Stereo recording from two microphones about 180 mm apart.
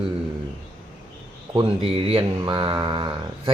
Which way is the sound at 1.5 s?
30° right (ahead or behind).